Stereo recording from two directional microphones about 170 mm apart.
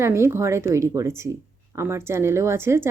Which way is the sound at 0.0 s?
15° right (ahead or behind).